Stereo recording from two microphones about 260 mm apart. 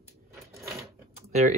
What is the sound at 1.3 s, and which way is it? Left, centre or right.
Speech, right.